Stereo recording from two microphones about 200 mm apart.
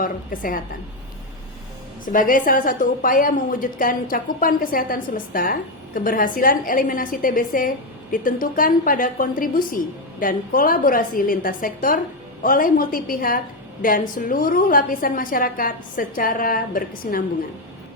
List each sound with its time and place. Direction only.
0.0 s a woman's voice: 45° left (ahead or behind)
2.1 s a woman's voice: 45° left (ahead or behind)